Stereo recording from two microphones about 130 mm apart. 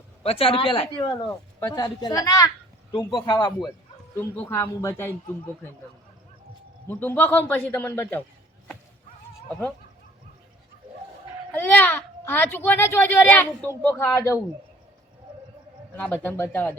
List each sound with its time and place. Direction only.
0.2 s a woman's voice: 50° left (ahead or behind)
4.1 s speech: 15° left (ahead or behind)
6.8 s speech: 15° left (ahead or behind)
9.5 s speech: 10° left (ahead or behind)
11.6 s speech: 15° left (ahead or behind)
16.0 s speech: 10° left (ahead or behind)